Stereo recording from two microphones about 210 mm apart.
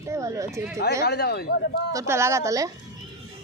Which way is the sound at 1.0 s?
50° left (ahead or behind).